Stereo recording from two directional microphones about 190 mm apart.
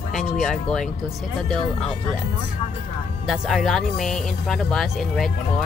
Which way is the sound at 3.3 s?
Centre (ahead or behind).